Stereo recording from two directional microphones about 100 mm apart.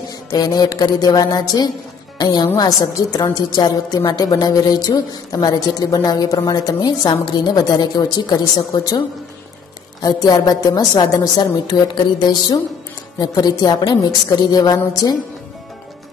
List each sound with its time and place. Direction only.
0.3 s a woman's voice: 40° left (ahead or behind)
10.0 s a woman's voice: 40° left (ahead or behind)